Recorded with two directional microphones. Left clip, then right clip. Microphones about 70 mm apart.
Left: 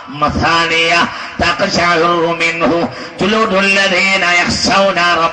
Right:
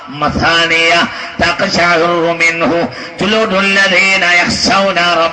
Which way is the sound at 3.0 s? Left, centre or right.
Right.